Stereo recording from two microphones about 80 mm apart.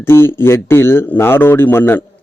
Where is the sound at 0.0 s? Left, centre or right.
Left.